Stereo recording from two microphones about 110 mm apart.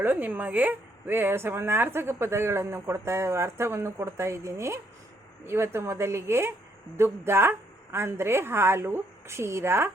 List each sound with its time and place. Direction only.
0.0 s a woman's voice: 15° right (ahead or behind)